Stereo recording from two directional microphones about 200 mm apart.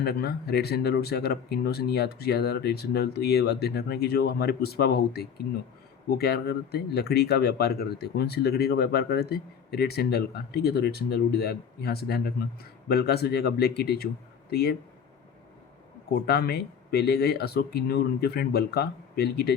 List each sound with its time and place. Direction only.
0.0 s speech: 50° left (ahead or behind)
16.2 s speech: 50° left (ahead or behind)